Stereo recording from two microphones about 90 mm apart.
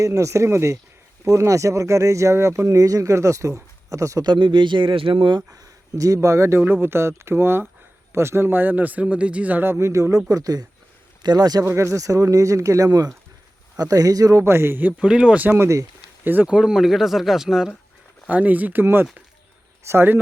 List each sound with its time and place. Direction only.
0.0 s speech: 35° right (ahead or behind)
4.3 s speech: 60° right (ahead or behind)
6.2 s speech: 30° right (ahead or behind)
6.6 s a man's voice: 20° right (ahead or behind); by 11.6 s 50° right (ahead or behind)
11.6 s speech: 30° right (ahead or behind)
14.9 s speech: 10° right (ahead or behind); by 15.9 s 30° right (ahead or behind)
16.2 s speech: 20° right (ahead or behind)
18.3 s speech: 15° right (ahead or behind)